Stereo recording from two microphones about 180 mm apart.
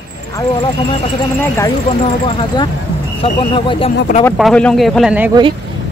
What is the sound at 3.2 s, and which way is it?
Speech, 30° left (ahead or behind).